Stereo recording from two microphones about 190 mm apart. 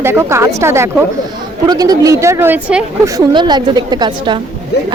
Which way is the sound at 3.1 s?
20° right (ahead or behind).